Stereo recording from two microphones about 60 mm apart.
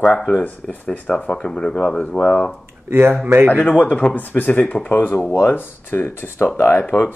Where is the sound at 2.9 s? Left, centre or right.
Right.